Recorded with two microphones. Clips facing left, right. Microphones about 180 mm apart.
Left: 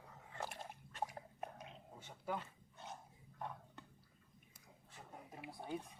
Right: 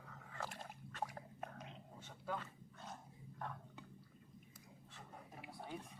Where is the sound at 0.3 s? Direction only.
20° left (ahead or behind).